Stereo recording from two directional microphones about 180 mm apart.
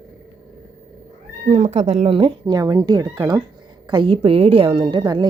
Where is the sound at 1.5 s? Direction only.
40° right (ahead or behind).